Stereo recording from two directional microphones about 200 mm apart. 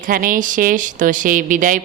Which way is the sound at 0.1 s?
45° right (ahead or behind).